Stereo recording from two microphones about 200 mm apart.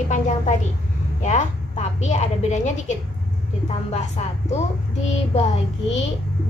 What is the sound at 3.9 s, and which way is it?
Speech, 30° left (ahead or behind).